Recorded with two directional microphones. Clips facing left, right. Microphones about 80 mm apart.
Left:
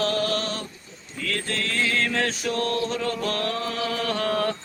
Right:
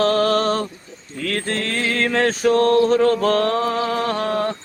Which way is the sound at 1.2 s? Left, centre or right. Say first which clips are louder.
Right 5 dB; right.